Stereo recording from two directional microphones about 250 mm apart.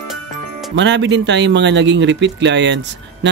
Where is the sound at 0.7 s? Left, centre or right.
Right.